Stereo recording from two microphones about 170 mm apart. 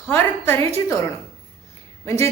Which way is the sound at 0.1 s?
15° left (ahead or behind).